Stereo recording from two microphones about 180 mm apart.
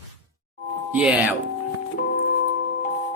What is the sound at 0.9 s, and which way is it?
Speech, 10° right (ahead or behind).